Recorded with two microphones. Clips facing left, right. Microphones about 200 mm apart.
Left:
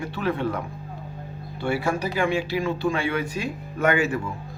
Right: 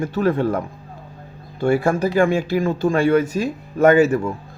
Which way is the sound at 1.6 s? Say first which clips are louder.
Right 7 dB; 50° right (ahead or behind).